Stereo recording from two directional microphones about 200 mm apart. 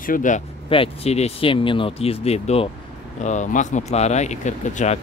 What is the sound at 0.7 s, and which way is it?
Speech, 30° left (ahead or behind).